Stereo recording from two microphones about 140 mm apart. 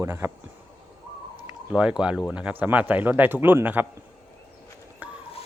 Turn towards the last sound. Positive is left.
turn(degrees=-15)  # may be behind; listen again after turning